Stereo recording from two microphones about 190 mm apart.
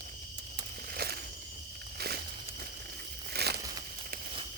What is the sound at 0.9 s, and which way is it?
Walk, 55° right (ahead or behind).